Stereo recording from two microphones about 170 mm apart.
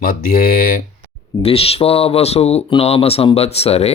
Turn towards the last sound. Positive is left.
turn(degrees=35)  # may be behind; listen again after turning